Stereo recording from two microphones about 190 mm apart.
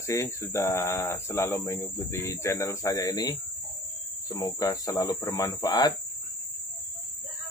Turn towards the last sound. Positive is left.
turn(degrees=20)  # may be behind; listen again after turning